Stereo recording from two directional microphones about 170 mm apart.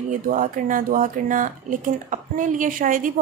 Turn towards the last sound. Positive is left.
turn(degrees=-50)  # may be behind; listen again after turning